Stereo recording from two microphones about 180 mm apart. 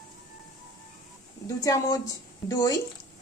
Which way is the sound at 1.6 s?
20° left (ahead or behind).